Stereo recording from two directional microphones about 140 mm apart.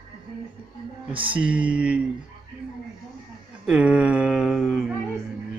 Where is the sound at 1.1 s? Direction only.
40° right (ahead or behind).